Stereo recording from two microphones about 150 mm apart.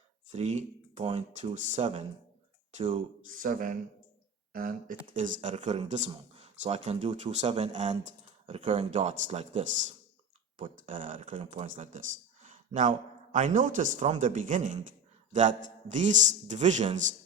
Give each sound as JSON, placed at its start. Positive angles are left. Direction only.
{"t": 0.3, "sound": "speech", "side_deg": -50}
{"t": 3.4, "sound": "a man's voice", "side_deg": -65}